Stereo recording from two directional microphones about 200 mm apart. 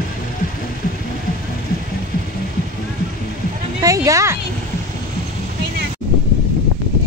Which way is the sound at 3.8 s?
15° right (ahead or behind).